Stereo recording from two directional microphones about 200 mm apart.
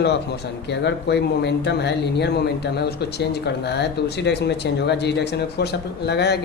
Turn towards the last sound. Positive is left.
turn(degrees=55)  # may be behind; listen again after turning